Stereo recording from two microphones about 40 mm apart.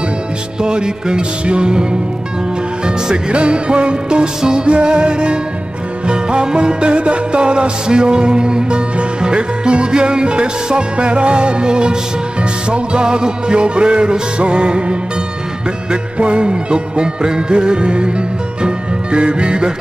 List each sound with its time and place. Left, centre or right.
0.6 s music: centre